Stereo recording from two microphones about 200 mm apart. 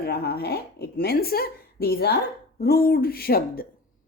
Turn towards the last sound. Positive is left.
turn(degrees=50)  # may be behind; listen again after turning